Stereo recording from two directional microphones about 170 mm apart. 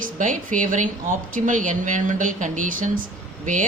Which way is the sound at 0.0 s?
50° right (ahead or behind).